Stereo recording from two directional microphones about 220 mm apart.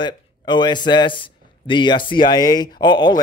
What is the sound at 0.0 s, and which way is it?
A man's voice, 20° left (ahead or behind).